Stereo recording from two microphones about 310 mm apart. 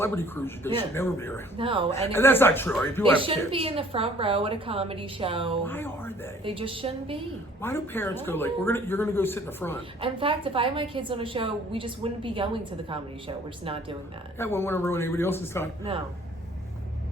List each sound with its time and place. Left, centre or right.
0.0 s a man's voice: centre
1.5 s a woman's voice: centre
2.1 s a man's voice: centre
3.2 s a woman's voice: centre
5.6 s a man's voice: centre
6.4 s a woman's voice: centre
7.6 s a man's voice: centre
10.0 s a woman's voice: centre
14.3 s a man's voice: centre